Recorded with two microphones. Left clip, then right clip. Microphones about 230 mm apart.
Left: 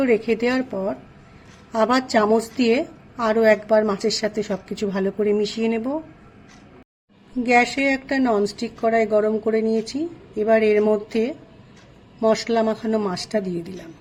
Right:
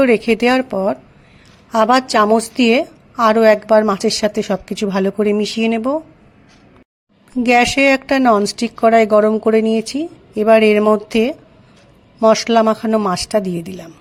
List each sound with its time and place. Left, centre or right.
0.0 s a woman's voice: right
7.4 s a woman's voice: right